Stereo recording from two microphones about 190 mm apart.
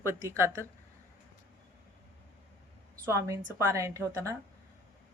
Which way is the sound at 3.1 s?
15° right (ahead or behind).